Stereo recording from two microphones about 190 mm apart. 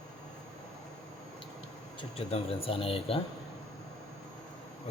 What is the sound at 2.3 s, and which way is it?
Speech, 30° left (ahead or behind).